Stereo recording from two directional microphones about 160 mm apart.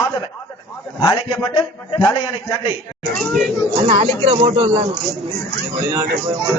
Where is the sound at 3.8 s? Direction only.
40° right (ahead or behind).